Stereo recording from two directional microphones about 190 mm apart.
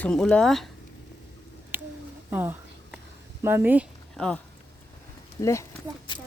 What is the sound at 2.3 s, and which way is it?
Speech, 10° right (ahead or behind).